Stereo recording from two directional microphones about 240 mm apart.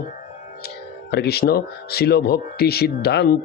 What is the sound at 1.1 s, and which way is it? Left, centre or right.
Speech, left.